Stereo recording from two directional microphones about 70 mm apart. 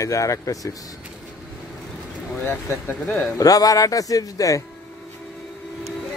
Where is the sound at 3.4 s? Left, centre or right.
Left.